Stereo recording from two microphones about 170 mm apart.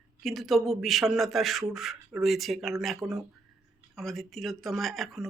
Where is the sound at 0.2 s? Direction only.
Centre (ahead or behind).